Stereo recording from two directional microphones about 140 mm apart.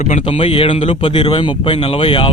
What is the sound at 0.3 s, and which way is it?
Speech, 45° left (ahead or behind).